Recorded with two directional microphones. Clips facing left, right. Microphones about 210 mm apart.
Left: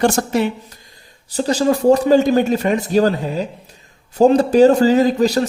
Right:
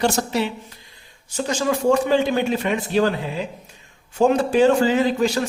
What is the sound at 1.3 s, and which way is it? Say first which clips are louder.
A man's voice: left 6 dB; 35° left (ahead or behind).